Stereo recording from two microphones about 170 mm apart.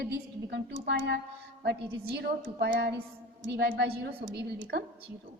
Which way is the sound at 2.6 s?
75° right (ahead or behind).